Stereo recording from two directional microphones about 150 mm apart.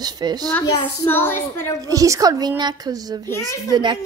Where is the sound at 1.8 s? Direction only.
20° right (ahead or behind).